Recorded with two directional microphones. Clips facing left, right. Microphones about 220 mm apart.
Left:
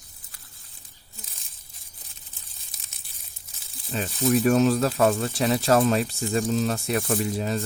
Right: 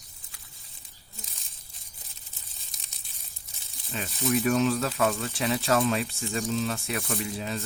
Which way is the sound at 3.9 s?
35° left (ahead or behind).